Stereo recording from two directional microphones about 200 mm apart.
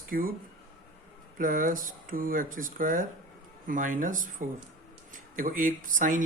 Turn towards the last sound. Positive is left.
turn(degrees=-40)  # may be behind; listen again after turning